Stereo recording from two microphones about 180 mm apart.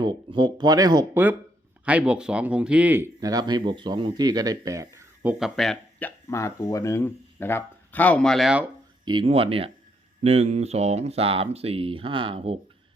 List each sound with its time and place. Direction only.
0.0 s speech: 25° right (ahead or behind); by 8.6 s centre (ahead or behind)
9.0 s speech: 30° right (ahead or behind)